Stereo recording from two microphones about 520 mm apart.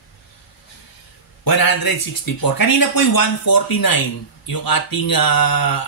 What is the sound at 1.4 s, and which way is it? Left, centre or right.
Speech, left.